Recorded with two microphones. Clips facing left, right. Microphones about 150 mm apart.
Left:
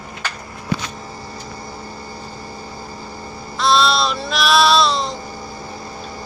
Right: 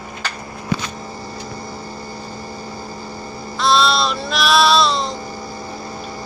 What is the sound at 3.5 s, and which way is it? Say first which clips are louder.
Music: even; centre (ahead or behind).